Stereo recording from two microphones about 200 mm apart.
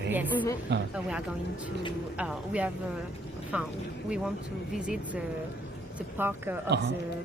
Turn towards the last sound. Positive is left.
turn(degrees=-55)  # may be behind; listen again after turning